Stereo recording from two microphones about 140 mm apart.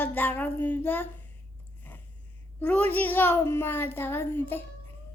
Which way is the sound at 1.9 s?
15° left (ahead or behind).